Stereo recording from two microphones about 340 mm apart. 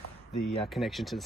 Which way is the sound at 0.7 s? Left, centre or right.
Centre.